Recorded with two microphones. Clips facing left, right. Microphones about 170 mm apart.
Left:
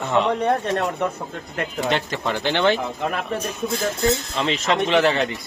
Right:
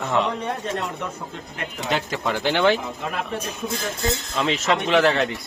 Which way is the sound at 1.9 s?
Centre (ahead or behind).